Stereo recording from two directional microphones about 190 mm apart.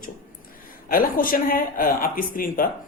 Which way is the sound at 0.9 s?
50° left (ahead or behind).